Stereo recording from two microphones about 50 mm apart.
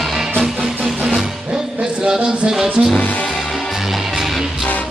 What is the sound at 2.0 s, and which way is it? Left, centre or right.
Music, centre.